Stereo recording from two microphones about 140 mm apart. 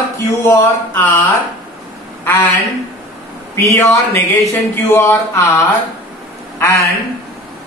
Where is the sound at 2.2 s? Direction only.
10° left (ahead or behind).